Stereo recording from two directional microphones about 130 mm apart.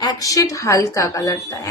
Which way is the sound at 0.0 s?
30° left (ahead or behind).